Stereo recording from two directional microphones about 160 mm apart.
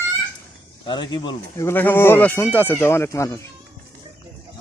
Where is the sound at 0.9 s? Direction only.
30° left (ahead or behind).